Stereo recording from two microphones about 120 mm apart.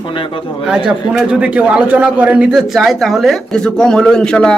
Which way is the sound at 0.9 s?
5° right (ahead or behind).